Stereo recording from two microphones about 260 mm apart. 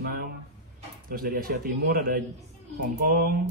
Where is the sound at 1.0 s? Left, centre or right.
Right.